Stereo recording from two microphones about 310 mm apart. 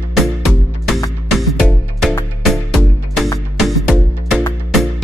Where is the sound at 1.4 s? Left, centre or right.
Centre.